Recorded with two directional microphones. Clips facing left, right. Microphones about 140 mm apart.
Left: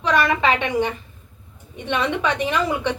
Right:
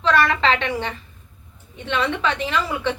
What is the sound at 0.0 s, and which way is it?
A woman's voice, 15° left (ahead or behind).